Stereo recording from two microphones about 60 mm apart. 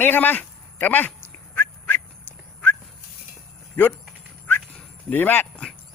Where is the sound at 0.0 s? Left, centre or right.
Left.